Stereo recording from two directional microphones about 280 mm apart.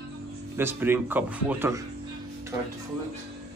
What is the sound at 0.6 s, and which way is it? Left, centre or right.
Speech, centre.